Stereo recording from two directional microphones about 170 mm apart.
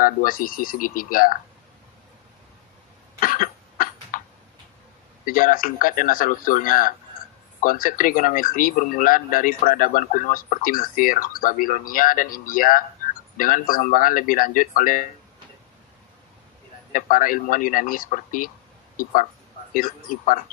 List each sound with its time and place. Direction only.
0.0 s speech: 55° left (ahead or behind)
3.2 s cough: 55° left (ahead or behind)
5.2 s speech: 55° left (ahead or behind)
16.9 s speech: 55° left (ahead or behind)
19.7 s speech: 55° left (ahead or behind)